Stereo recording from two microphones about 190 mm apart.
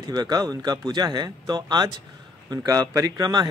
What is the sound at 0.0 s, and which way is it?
Speech, 20° right (ahead or behind).